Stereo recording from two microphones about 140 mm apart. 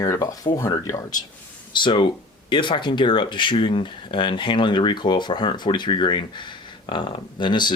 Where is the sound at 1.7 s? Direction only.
35° left (ahead or behind).